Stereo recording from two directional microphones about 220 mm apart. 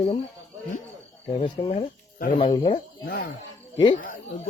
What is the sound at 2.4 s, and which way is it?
Speech, 20° left (ahead or behind).